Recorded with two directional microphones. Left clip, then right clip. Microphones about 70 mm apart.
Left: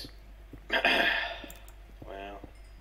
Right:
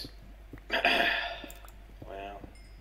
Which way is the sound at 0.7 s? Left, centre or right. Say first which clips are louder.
Left 1 dB; left.